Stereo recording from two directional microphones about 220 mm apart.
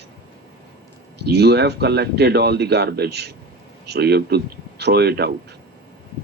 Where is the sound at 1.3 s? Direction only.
50° right (ahead or behind).